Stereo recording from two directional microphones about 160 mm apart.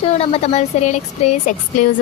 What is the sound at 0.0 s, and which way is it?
Speech, 40° left (ahead or behind).